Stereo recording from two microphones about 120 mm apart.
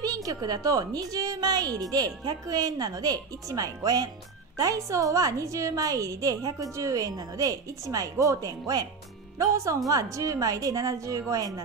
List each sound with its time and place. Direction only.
0.0 s a woman's voice: 30° right (ahead or behind)